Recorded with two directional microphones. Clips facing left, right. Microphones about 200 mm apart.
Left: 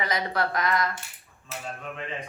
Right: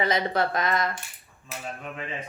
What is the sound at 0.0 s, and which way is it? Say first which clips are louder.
Speech: right 3 dB; 25° right (ahead or behind).